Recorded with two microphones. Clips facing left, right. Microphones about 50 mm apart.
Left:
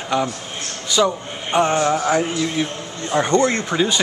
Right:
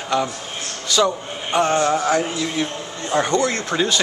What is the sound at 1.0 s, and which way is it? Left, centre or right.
Speech, centre.